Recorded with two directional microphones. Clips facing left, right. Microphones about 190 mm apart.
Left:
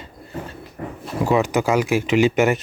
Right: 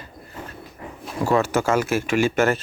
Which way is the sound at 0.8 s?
50° left (ahead or behind).